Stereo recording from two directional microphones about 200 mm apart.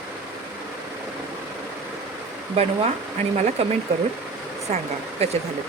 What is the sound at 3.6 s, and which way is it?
Speech, 30° right (ahead or behind).